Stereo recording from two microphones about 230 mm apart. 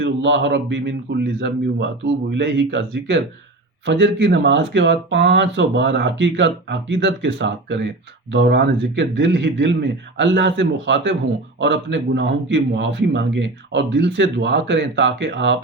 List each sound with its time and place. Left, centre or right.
0.0 s speech: right